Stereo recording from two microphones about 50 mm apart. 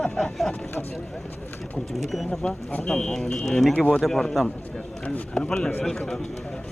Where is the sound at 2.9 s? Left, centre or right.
Centre.